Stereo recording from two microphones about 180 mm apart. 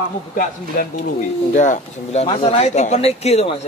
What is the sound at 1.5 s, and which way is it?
A man's voice, 40° left (ahead or behind).